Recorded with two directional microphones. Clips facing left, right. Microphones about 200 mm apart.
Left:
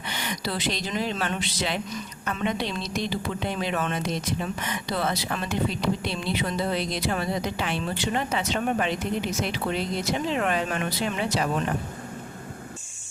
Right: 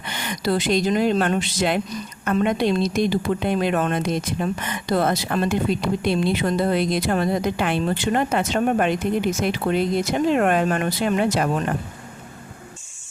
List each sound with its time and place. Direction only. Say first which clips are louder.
0.1 s a woman's voice: right 8 dB; 50° right (ahead or behind)